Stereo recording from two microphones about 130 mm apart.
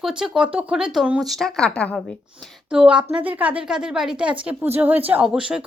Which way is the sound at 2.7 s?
5° right (ahead or behind).